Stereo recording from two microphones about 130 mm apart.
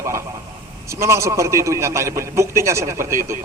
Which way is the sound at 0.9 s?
20° right (ahead or behind).